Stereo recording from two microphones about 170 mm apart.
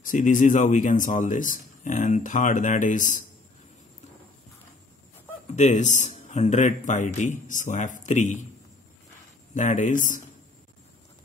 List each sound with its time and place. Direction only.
0.0 s speech: 50° left (ahead or behind)
5.6 s a man's voice: 45° left (ahead or behind)
9.5 s speech: 45° left (ahead or behind)